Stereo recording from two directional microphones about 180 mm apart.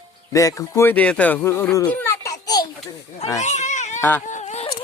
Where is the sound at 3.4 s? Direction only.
40° left (ahead or behind).